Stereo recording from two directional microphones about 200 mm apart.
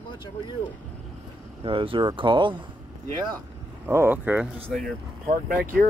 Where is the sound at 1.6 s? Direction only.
25° right (ahead or behind).